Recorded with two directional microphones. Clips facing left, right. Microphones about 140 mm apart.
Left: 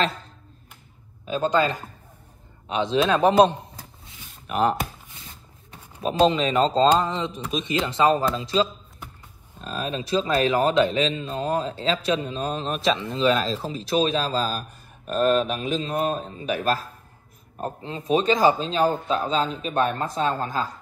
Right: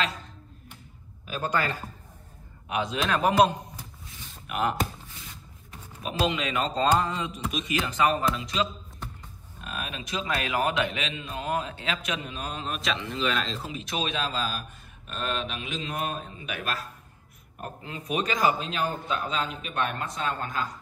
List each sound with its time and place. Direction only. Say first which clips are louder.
1.2 s speech: left 7 dB; 25° left (ahead or behind)
4.0 s a sound: right 1 dB; 30° left (ahead or behind)
5.0 s zipper: even; 25° left (ahead or behind)
7.5 s a man's voice: left 5 dB; 25° left (ahead or behind)